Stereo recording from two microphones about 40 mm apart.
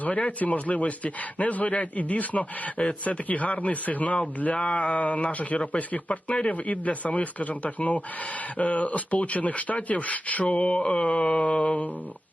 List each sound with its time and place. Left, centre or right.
0.0 s speech: left
4.5 s speech: left